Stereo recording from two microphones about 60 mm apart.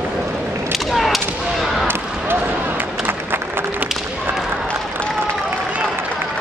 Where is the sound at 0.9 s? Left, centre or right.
Centre.